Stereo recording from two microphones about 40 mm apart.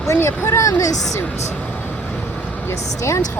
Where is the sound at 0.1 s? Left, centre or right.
Left.